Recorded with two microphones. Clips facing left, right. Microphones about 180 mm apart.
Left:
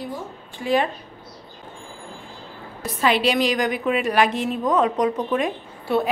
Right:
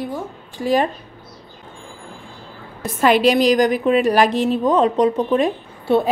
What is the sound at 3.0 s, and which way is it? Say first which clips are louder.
A woman's voice: right 5 dB; 45° right (ahead or behind).